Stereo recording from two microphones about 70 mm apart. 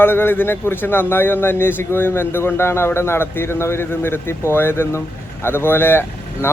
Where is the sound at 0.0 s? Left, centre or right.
Left.